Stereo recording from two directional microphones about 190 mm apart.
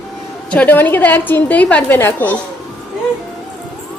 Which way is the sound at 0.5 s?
10° left (ahead or behind).